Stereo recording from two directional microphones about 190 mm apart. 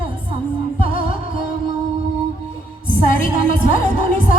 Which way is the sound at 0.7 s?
30° right (ahead or behind).